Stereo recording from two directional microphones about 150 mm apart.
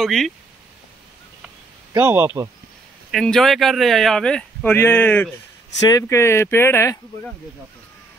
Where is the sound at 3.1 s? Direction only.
5° left (ahead or behind).